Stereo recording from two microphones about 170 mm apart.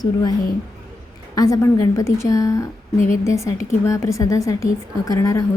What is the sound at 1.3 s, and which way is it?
A woman's voice, 20° left (ahead or behind).